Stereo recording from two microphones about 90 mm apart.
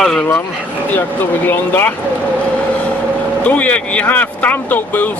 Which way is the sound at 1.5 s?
25° left (ahead or behind).